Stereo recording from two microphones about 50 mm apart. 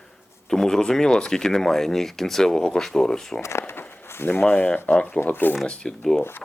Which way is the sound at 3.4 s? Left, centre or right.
Left.